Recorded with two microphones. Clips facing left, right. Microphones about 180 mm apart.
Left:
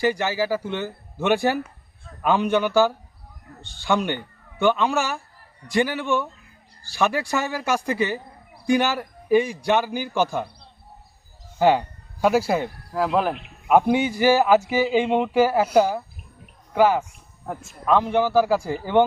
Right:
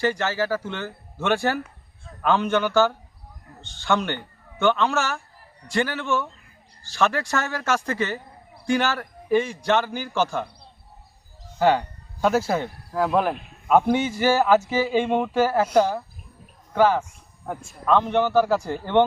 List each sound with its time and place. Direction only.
0.0 s a man's voice: 15° left (ahead or behind)
11.6 s speech: 15° left (ahead or behind)
12.9 s cricket: centre (ahead or behind)
13.7 s a man's voice: 10° left (ahead or behind)